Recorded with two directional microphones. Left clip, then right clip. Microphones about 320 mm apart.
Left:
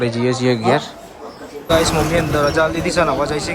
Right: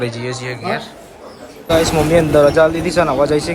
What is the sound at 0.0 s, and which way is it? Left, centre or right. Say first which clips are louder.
A man's voice: left 5 dB; centre.